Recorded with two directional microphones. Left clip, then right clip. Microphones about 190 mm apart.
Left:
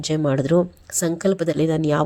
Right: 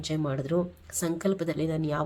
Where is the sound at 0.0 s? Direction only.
35° left (ahead or behind).